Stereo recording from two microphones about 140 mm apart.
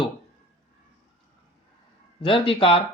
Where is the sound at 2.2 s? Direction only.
40° left (ahead or behind).